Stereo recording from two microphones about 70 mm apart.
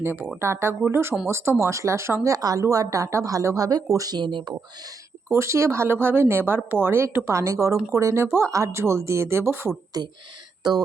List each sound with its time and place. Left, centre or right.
0.0 s speech: right
2.3 s a woman's voice: right
2.6 s a woman's voice: right
5.3 s speech: right
7.3 s a woman's voice: right
10.0 s speech: right